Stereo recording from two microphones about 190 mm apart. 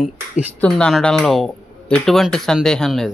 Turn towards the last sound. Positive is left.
turn(degrees=0)  # may be behind; listen again after turning